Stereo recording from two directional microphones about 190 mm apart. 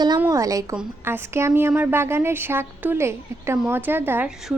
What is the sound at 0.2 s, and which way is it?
A woman's voice, 15° right (ahead or behind).